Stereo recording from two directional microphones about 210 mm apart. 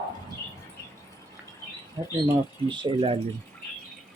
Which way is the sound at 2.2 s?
20° right (ahead or behind).